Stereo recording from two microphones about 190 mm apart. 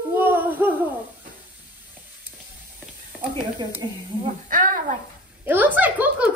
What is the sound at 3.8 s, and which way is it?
Speech, 25° right (ahead or behind).